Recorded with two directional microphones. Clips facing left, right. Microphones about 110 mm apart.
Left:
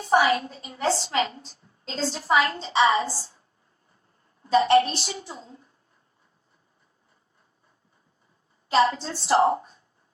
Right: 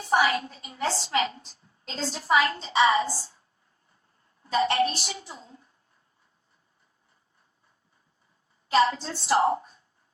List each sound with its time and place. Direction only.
0.0 s a woman's voice: 30° left (ahead or behind)
4.4 s a woman's voice: 30° left (ahead or behind)
8.7 s a woman's voice: 25° left (ahead or behind)